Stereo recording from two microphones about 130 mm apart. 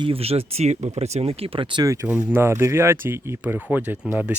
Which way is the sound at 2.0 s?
10° right (ahead or behind).